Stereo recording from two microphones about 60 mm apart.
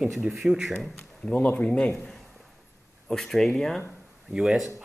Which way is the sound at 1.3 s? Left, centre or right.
Left.